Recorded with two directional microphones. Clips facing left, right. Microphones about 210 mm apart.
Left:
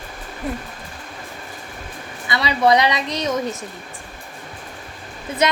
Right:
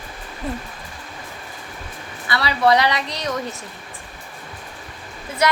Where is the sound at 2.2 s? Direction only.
20° left (ahead or behind).